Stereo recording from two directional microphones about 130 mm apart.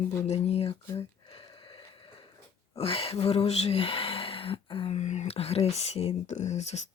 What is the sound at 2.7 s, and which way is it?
Speech, 45° left (ahead or behind).